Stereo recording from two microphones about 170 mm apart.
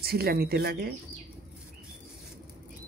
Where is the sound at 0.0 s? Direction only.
65° right (ahead or behind).